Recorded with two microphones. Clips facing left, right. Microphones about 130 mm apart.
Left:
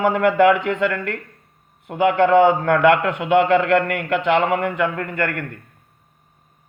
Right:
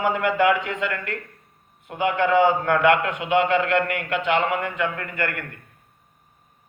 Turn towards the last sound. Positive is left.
turn(degrees=30)  # may be behind; listen again after turning